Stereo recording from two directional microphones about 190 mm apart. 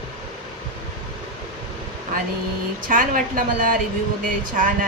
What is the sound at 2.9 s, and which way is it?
Speech, 45° right (ahead or behind).